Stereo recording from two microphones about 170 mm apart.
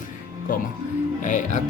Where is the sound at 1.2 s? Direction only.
45° left (ahead or behind).